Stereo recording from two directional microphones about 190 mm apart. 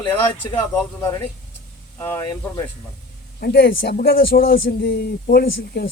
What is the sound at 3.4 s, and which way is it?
Speech, 55° left (ahead or behind).